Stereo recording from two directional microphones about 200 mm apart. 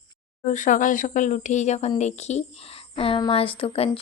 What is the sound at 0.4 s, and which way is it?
A woman's voice, 40° left (ahead or behind).